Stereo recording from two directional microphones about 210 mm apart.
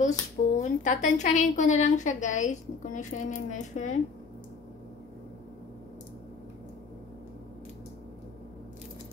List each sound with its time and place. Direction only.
0.4 s a woman's voice: 35° left (ahead or behind)